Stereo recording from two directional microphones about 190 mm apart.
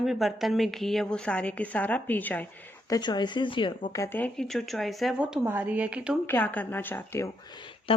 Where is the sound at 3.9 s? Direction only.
10° left (ahead or behind); by 6.2 s 5° right (ahead or behind).